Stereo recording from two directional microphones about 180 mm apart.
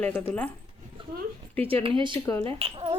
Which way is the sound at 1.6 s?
30° right (ahead or behind).